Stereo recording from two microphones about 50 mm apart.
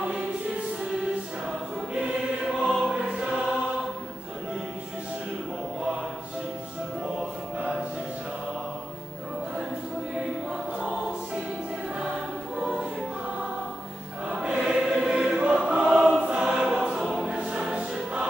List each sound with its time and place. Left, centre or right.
2.6 s choir: centre
14.4 s choir: centre